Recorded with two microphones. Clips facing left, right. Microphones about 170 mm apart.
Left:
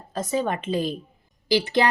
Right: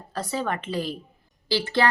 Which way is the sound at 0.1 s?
20° left (ahead or behind).